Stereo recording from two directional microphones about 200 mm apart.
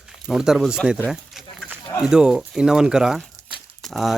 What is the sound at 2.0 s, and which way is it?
Speech, 5° right (ahead or behind).